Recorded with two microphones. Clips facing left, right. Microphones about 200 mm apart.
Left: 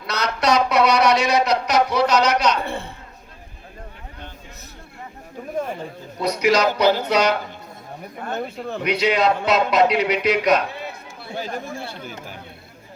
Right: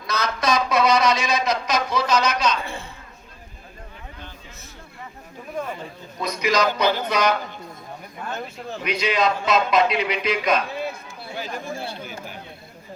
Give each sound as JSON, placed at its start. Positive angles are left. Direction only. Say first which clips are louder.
{"t": 0.0, "sound": "a sound", "louder": "left 2 dB", "side_deg": 65}
{"t": 6.2, "sound": "a man's voice", "louder": "left 4 dB", "side_deg": 65}
{"t": 8.3, "sound": "a man's voice", "louder": "left 5 dB", "side_deg": 60}